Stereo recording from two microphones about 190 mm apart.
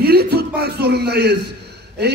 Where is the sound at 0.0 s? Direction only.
55° right (ahead or behind).